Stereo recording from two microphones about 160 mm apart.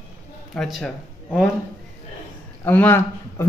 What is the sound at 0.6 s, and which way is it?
Speech, centre (ahead or behind).